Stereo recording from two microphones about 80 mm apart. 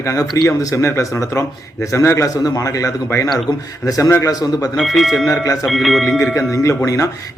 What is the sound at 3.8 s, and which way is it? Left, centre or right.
Speech, left.